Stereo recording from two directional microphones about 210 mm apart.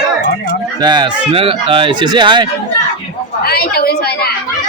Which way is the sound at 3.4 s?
45° left (ahead or behind).